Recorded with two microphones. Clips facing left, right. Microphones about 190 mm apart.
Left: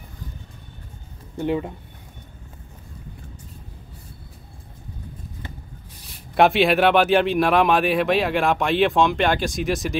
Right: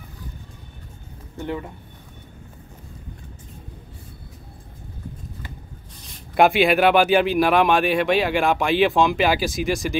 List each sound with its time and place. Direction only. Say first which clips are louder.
1.4 s speech: left 5 dB; 15° left (ahead or behind)
6.3 s speech: even; centre (ahead or behind)